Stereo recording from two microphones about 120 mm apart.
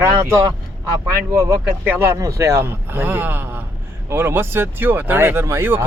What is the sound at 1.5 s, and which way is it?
Speech, 20° right (ahead or behind).